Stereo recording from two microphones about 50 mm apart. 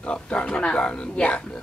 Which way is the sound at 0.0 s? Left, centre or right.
Left.